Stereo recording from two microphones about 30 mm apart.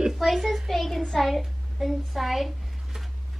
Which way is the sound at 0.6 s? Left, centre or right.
Centre.